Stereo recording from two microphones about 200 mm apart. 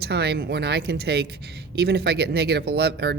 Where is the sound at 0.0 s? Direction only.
55° right (ahead or behind).